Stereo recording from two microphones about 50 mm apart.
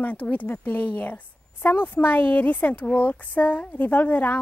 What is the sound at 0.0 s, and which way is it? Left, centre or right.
Speech, left.